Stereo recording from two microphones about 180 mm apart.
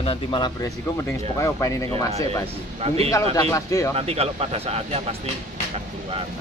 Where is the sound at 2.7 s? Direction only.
35° right (ahead or behind).